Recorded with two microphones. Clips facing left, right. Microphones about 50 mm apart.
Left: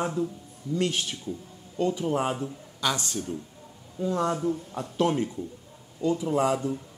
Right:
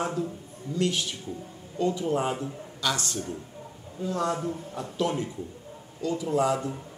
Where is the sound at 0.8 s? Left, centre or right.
Left.